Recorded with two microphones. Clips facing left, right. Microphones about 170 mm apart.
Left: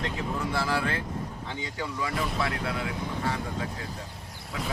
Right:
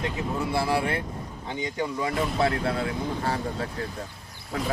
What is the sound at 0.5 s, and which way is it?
Speech, 15° right (ahead or behind).